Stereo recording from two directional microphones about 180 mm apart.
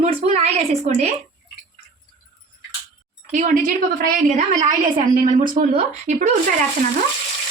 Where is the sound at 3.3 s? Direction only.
45° right (ahead or behind).